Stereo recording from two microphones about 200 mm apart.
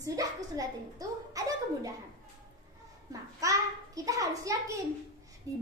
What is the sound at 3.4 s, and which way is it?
A child's voice, 15° right (ahead or behind).